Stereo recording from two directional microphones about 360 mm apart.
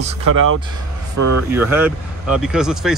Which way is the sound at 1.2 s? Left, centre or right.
Right.